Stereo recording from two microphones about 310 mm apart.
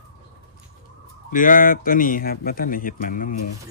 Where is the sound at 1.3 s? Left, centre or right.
Left.